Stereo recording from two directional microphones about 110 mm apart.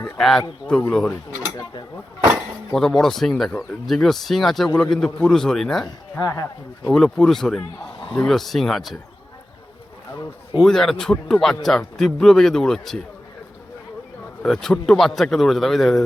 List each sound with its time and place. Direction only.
0.2 s a man's voice: centre (ahead or behind)
1.4 s speech: 40° left (ahead or behind)
2.7 s a man's voice: 5° left (ahead or behind)
6.1 s speech: 30° left (ahead or behind)
6.8 s a man's voice: 5° left (ahead or behind)
10.6 s a man's voice: 5° left (ahead or behind)
14.4 s a man's voice: 5° left (ahead or behind)